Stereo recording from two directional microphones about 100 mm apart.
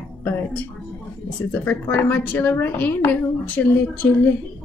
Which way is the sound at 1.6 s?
20° left (ahead or behind).